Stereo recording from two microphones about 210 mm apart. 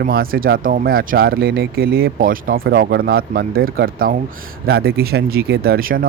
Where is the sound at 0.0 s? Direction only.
45° right (ahead or behind).